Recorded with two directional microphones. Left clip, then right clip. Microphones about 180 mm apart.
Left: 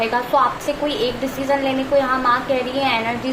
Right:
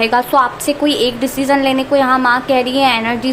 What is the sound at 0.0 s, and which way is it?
A woman's voice, 60° right (ahead or behind).